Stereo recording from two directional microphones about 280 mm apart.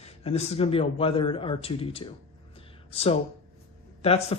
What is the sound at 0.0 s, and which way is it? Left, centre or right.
Speech, left.